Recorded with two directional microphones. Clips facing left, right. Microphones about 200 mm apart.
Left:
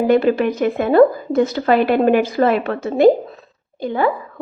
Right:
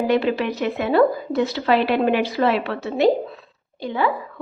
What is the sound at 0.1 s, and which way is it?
A woman's voice, 50° left (ahead or behind).